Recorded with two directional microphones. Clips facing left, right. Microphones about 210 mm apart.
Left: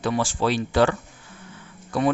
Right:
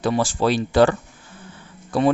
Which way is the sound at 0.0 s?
35° right (ahead or behind).